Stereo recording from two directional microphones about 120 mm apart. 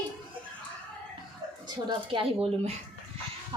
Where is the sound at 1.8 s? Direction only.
45° right (ahead or behind).